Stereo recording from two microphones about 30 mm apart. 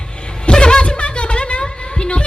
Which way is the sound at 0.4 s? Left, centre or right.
Left.